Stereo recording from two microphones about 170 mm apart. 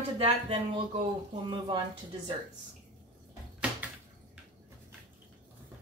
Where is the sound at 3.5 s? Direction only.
5° right (ahead or behind).